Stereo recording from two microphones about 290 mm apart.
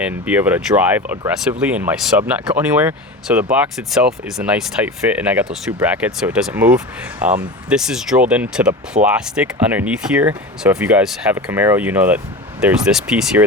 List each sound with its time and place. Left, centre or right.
0.0 s speech: centre